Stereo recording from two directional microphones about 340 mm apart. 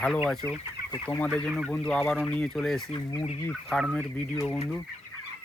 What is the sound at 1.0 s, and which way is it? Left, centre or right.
Speech, centre.